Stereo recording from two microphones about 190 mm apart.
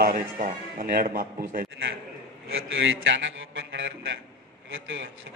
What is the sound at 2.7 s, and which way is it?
A man's voice, 75° right (ahead or behind).